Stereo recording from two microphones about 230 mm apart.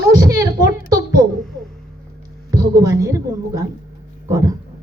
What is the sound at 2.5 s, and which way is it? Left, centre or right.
A woman's voice, centre.